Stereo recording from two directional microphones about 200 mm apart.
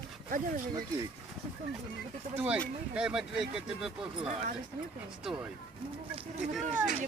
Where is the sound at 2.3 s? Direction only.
5° right (ahead or behind).